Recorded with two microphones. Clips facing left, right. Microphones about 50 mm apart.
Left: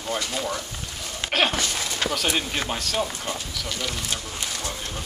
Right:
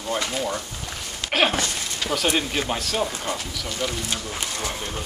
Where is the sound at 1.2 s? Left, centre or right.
Left.